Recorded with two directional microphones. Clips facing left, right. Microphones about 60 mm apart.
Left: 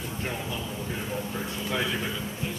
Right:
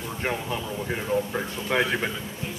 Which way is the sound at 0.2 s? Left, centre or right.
Right.